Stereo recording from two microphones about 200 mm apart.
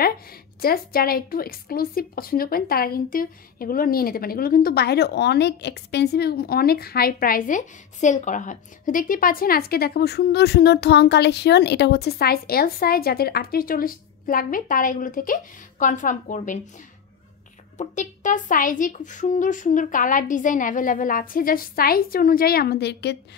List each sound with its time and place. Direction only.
0.0 s a woman's voice: 50° left (ahead or behind)
17.7 s speech: 40° left (ahead or behind); by 23.1 s 55° left (ahead or behind)